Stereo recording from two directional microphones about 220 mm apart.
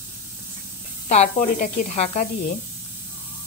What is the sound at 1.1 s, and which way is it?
Speech, 35° left (ahead or behind).